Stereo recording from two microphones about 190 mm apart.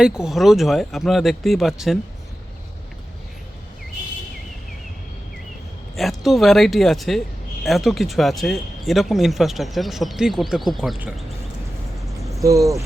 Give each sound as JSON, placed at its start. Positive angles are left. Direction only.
{"t": 0.0, "sound": "speech", "side_deg": -5}
{"t": 6.0, "sound": "speech", "side_deg": 0}
{"t": 12.4, "sound": "speech", "side_deg": -15}